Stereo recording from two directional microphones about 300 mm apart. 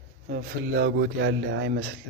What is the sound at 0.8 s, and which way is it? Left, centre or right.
A man's voice, right.